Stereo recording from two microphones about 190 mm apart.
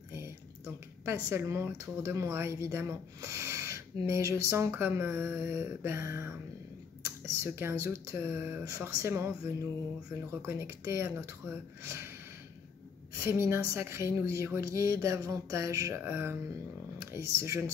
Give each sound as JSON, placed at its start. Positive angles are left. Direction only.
{"t": 1.0, "sound": "speech", "side_deg": -15}
{"t": 13.1, "sound": "speech", "side_deg": -15}